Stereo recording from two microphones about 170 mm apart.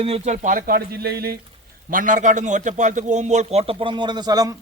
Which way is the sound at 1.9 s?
50° right (ahead or behind).